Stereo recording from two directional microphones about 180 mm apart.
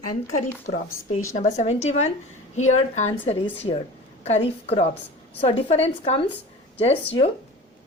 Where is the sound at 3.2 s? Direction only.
35° left (ahead or behind).